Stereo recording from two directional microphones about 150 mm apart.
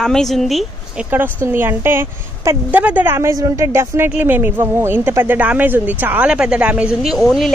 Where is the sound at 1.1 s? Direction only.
15° right (ahead or behind).